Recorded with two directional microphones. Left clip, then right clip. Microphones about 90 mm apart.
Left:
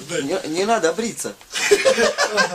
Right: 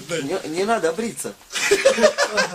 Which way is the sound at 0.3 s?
15° left (ahead or behind).